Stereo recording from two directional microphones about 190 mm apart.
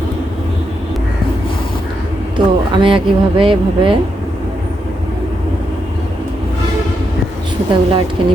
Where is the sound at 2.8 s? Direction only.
25° right (ahead or behind).